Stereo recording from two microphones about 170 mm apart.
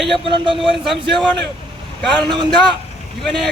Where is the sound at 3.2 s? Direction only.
Centre (ahead or behind).